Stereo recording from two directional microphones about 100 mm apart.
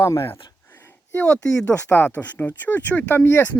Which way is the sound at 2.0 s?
20° left (ahead or behind).